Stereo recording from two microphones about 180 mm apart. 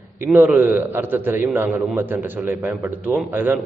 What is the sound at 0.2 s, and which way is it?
A man's voice, 10° right (ahead or behind).